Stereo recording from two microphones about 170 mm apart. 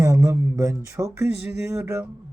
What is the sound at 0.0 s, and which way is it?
Mantra, 15° right (ahead or behind).